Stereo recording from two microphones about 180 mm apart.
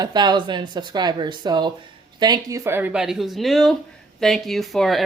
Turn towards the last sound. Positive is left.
turn(degrees=0)  # may be behind; listen again after turning